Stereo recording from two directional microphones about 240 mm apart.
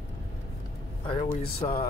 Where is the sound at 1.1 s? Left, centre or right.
Left.